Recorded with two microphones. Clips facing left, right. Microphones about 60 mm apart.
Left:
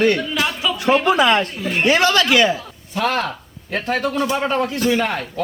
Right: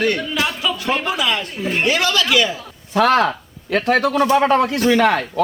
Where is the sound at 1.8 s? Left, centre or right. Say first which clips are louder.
Left 4 dB; left.